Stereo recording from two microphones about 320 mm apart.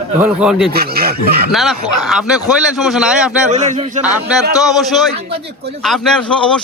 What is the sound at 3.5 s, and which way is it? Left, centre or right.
Speech, right.